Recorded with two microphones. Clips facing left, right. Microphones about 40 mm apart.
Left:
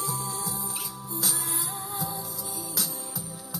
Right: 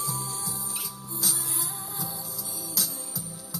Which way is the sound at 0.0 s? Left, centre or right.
Centre.